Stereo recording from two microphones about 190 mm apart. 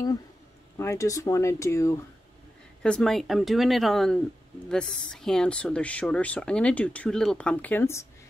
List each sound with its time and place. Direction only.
0.7 s speech: 15° left (ahead or behind)
2.8 s speech: 5° left (ahead or behind)